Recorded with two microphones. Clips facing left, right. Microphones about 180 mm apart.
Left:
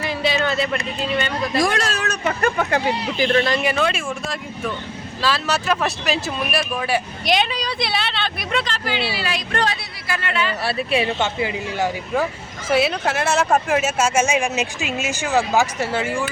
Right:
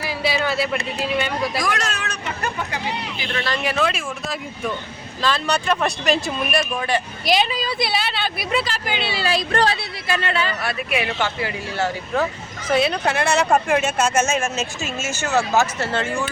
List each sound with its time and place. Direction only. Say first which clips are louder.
0.0 s speech: left 1 dB; 5° right (ahead or behind)
1.5 s speech: left 4 dB; 30° left (ahead or behind); by 2.5 s 45° left (ahead or behind)
2.6 s speech: left 6 dB; 55° left (ahead or behind)
3.6 s speech: left 1 dB; centre (ahead or behind)
9.0 s speech: right 2 dB; 25° right (ahead or behind)
10.6 s speech: left 3 dB; 30° left (ahead or behind); by 16.2 s 10° left (ahead or behind)